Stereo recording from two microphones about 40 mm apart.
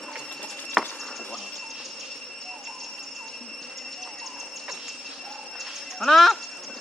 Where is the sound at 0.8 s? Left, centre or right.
Centre.